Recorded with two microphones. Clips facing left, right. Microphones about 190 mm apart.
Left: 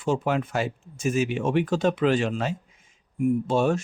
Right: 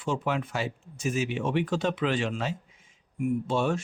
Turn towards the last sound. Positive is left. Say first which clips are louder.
# left 4 dB
turn(degrees=45)  # may be behind; listen again after turning